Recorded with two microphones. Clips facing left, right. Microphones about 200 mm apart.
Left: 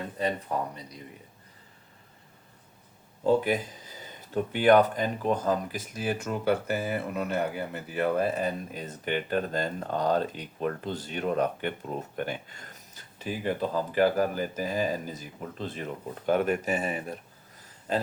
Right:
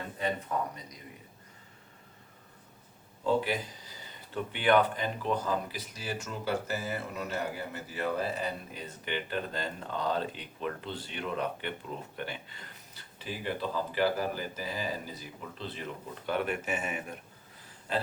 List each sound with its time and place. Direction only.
0.2 s speech: 35° left (ahead or behind)
3.2 s speech: 45° left (ahead or behind)